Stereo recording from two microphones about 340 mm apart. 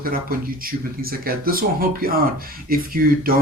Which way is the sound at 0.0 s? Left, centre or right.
Right.